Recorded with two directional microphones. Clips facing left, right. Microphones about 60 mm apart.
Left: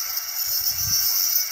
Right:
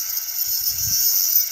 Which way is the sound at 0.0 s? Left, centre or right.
Left.